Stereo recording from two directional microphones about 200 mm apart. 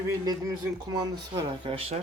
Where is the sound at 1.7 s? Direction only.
30° right (ahead or behind).